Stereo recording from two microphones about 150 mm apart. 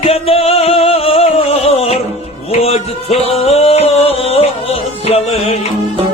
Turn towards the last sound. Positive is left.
turn(degrees=40)  # may be behind; listen again after turning